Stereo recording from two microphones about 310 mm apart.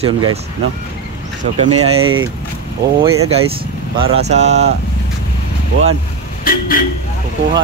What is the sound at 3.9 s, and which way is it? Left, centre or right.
Speech, centre.